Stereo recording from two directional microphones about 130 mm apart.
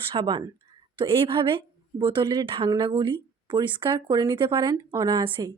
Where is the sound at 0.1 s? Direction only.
35° right (ahead or behind).